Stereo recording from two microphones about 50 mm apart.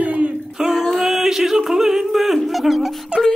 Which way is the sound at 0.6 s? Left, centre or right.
Centre.